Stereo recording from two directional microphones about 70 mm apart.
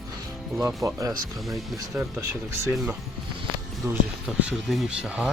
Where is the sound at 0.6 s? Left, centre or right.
Right.